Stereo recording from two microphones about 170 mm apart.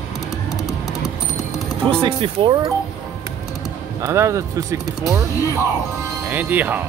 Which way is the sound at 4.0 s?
15° right (ahead or behind).